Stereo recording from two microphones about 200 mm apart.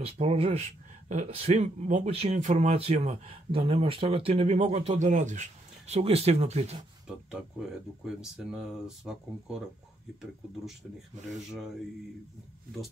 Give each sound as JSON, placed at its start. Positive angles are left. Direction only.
{"t": 0.0, "sound": "speech", "side_deg": -30}
{"t": 7.1, "sound": "speech", "side_deg": -5}